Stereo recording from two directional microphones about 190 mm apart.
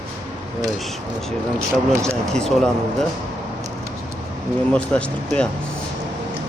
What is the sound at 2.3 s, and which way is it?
Speech, 5° left (ahead or behind).